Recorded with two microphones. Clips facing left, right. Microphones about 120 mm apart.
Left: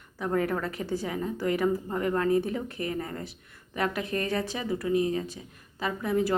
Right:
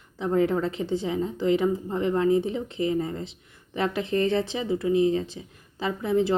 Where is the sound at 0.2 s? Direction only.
25° right (ahead or behind).